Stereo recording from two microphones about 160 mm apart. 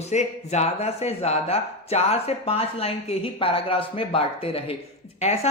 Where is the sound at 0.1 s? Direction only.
45° left (ahead or behind).